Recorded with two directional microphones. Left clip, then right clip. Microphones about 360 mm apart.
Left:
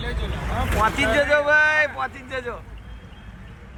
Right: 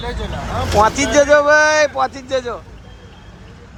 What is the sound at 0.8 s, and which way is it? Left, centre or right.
A man's voice, centre.